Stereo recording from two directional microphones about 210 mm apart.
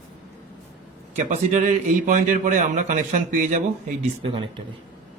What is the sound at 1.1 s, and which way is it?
A man's voice, 35° right (ahead or behind).